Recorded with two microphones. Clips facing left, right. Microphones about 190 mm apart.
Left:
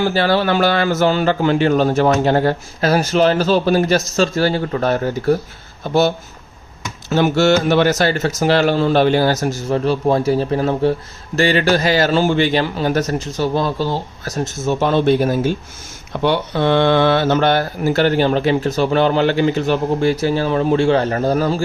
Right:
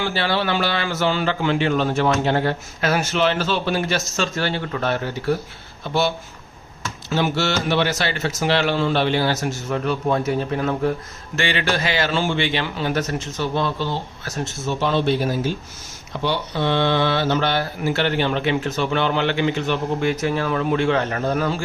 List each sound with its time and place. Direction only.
0.0 s a man's voice: 45° left (ahead or behind)